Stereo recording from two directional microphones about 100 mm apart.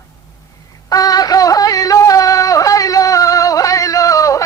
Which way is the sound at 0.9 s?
40° left (ahead or behind).